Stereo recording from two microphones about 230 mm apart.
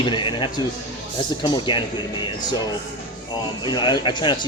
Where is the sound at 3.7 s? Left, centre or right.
Centre.